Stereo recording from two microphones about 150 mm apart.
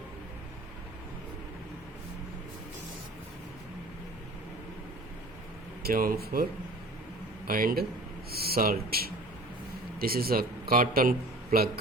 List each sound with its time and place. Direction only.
5.8 s a man's voice: 70° right (ahead or behind)
8.3 s speech: 90° right; by 11.1 s 70° right (ahead or behind)